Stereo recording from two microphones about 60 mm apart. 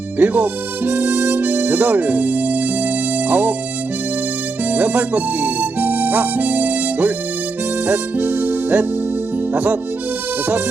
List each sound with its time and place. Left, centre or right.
0.2 s harmonica: right
3.2 s music: right
4.7 s harmonica: right
9.5 s speech: right